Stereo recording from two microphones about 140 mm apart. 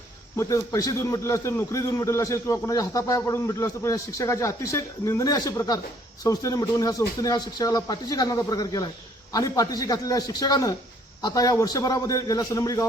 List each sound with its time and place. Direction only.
0.3 s a man's voice: 25° left (ahead or behind)